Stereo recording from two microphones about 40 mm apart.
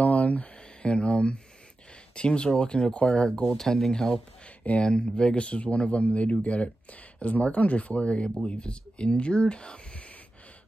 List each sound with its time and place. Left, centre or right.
0.0 s a sound: left
2.1 s speech: left
3.3 s speech: centre